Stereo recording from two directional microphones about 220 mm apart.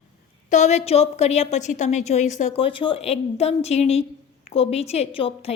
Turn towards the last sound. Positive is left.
turn(degrees=25)  # may be behind; listen again after turning